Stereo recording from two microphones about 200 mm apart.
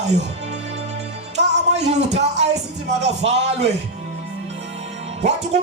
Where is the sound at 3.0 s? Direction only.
35° right (ahead or behind).